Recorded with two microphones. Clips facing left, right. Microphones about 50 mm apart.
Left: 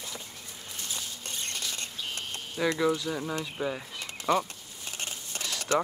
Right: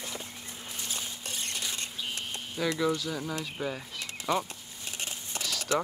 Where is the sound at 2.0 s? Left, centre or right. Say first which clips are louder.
Even; centre.